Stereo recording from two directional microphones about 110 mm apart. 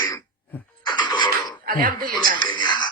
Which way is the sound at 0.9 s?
45° left (ahead or behind).